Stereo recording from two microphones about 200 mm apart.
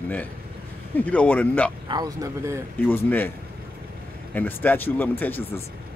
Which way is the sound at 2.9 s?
10° left (ahead or behind).